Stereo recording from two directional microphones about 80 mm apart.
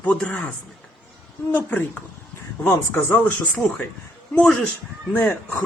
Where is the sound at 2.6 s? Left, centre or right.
Left.